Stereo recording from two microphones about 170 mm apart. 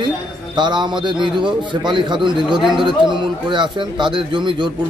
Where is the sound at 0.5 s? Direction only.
25° right (ahead or behind).